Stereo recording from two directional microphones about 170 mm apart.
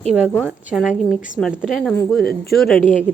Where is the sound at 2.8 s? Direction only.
50° left (ahead or behind).